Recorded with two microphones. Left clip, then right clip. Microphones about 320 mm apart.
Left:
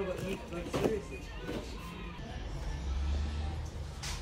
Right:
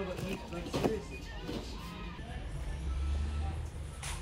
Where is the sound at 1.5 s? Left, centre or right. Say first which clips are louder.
Left 2 dB; centre.